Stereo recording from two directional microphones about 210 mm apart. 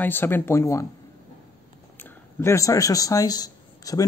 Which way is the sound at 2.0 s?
15° left (ahead or behind).